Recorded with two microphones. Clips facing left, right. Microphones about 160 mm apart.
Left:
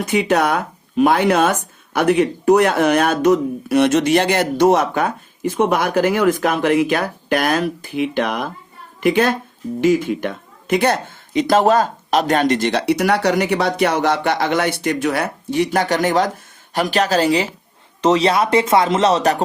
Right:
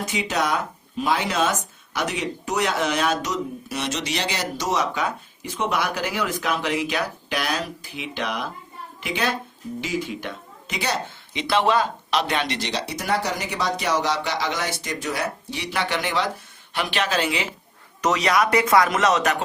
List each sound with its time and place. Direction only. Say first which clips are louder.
0.0 s a woman's voice: left 8 dB; 60° left (ahead or behind); by 19.4 s 30° left (ahead or behind)